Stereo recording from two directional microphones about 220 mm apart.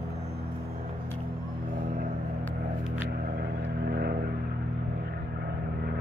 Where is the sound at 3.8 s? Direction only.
45° right (ahead or behind).